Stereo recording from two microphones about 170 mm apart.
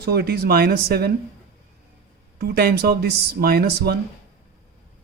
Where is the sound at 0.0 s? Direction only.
70° right (ahead or behind).